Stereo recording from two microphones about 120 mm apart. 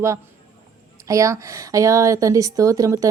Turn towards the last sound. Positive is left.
turn(degrees=-25)  # may be behind; listen again after turning